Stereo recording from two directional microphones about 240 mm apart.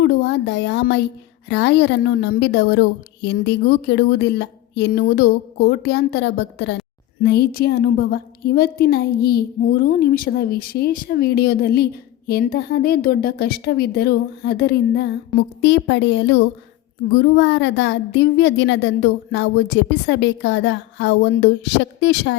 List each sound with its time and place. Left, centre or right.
0.0 s a woman's voice: left